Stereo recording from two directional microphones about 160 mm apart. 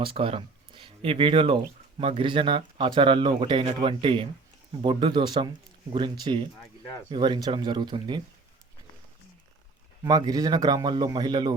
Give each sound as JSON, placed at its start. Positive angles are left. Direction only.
{"t": 0.0, "sound": "speech", "side_deg": -35}
{"t": 10.0, "sound": "speech", "side_deg": -25}